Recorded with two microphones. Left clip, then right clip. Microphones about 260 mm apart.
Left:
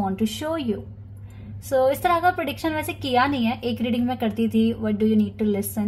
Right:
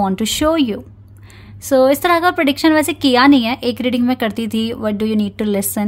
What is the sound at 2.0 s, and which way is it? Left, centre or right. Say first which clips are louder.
A woman's voice: right 6 dB; right.